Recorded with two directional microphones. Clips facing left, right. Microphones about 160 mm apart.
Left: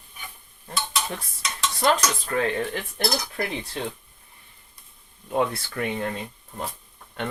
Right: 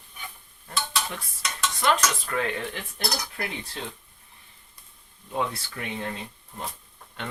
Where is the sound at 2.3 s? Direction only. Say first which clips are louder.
Left 5 dB; 35° left (ahead or behind).